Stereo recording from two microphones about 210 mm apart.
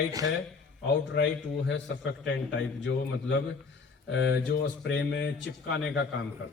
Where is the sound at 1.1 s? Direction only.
55° left (ahead or behind).